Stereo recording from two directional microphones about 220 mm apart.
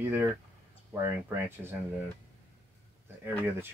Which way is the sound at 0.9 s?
10° right (ahead or behind).